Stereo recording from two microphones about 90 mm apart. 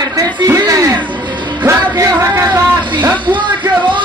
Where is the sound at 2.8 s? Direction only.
60° right (ahead or behind).